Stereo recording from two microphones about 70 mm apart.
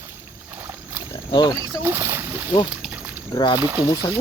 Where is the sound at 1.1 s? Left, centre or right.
Left.